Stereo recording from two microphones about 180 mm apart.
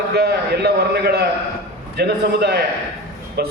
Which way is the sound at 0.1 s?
60° right (ahead or behind).